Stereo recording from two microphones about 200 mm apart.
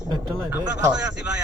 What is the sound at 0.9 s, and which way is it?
Speech, 5° right (ahead or behind).